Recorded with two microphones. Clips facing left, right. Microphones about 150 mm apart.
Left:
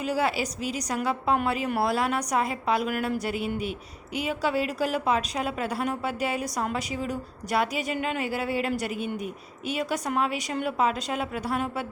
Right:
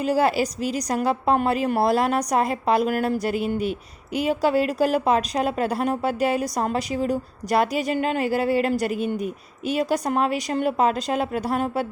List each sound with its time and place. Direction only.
0.0 s a woman's voice: 40° right (ahead or behind)